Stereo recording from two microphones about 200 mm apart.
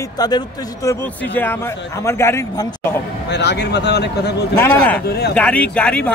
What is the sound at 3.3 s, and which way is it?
Speech, 55° left (ahead or behind).